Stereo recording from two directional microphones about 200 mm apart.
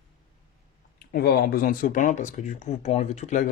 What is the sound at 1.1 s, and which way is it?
Speech, 50° left (ahead or behind).